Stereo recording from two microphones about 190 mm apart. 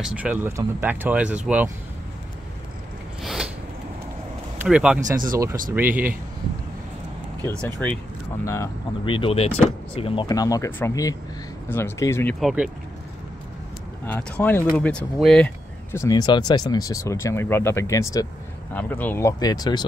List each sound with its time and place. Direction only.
0.0 s speech: 5° right (ahead or behind)
3.2 s a sound: centre (ahead or behind)
4.6 s speech: 5° right (ahead or behind)
5.1 s speech: 45° right (ahead or behind)
5.4 s speech: 15° right (ahead or behind)
9.0 s speech: 25° left (ahead or behind)
12.4 s speech: centre (ahead or behind)
14.0 s speech: 10° left (ahead or behind)